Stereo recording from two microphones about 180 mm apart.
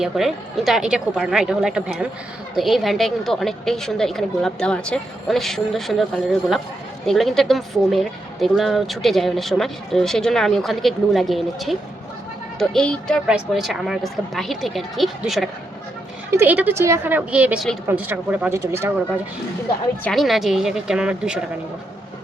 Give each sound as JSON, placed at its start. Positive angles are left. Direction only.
{"t": 0.0, "sound": "speech", "side_deg": 0}
{"t": 7.1, "sound": "a woman's voice", "side_deg": 0}
{"t": 20.1, "sound": "speech", "side_deg": 0}